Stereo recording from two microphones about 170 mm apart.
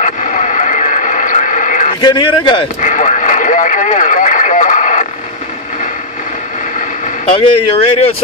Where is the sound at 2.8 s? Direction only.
50° left (ahead or behind).